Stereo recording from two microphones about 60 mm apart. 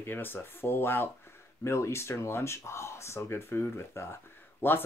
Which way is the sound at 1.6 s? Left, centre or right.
Left.